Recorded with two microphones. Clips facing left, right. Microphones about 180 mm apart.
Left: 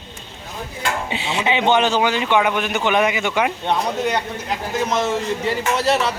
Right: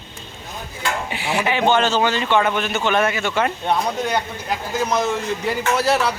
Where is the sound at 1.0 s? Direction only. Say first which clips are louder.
Right 1 dB; 20° left (ahead or behind).